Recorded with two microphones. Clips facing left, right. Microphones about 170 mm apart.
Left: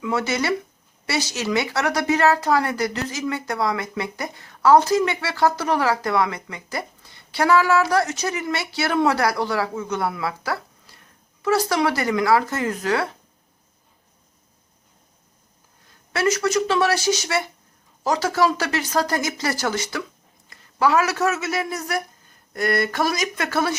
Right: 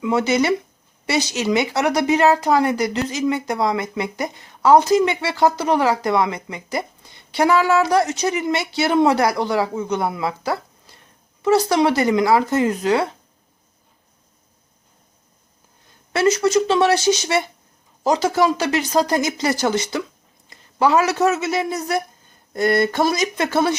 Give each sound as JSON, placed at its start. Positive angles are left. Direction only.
{"t": 0.0, "sound": "speech", "side_deg": -20}
{"t": 16.1, "sound": "speech", "side_deg": -20}